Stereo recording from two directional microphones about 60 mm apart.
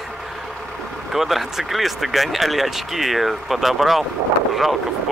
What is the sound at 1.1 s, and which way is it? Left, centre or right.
Speech, centre.